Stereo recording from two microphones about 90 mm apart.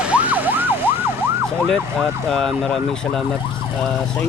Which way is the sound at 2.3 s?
5° left (ahead or behind).